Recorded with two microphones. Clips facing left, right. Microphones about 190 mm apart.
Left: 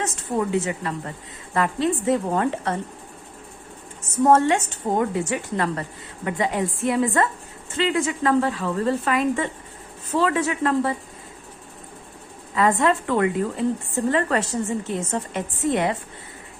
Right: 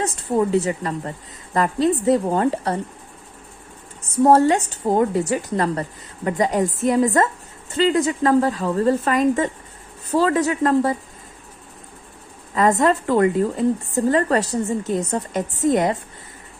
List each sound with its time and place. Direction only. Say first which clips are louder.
0.0 s a woman's voice: right 4 dB; 35° right (ahead or behind)
4.0 s a woman's voice: right 3 dB; 35° right (ahead or behind)
12.5 s a woman's voice: right 3 dB; 40° right (ahead or behind)